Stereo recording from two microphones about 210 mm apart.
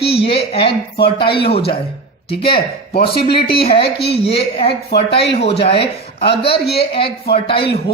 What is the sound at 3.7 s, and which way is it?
Speech, 50° left (ahead or behind).